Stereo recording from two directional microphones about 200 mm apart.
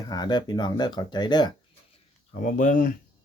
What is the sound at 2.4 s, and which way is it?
Speech, 40° left (ahead or behind).